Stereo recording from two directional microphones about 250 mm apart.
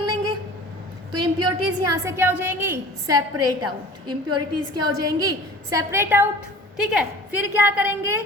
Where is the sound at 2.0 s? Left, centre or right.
Centre.